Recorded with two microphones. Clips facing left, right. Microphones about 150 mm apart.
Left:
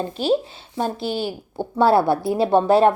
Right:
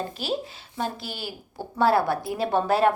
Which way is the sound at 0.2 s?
30° left (ahead or behind).